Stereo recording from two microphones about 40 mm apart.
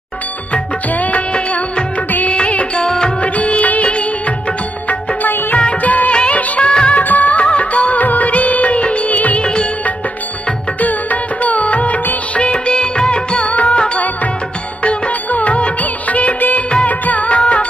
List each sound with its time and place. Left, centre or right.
0.5 s music: left; by 3.1 s centre
3.2 s music of bollywood: left
4.8 s music: left
5.8 s music of bollywood: left
6.6 s music of bollywood: left
7.0 s music of bollywood: left
9.4 s music: left
10.8 s music of bollywood: left
13.6 s music: left
14.8 s music of bollywood: left
16.8 s music: left